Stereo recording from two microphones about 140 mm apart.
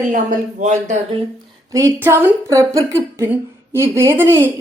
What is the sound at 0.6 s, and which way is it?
Speech, 55° right (ahead or behind).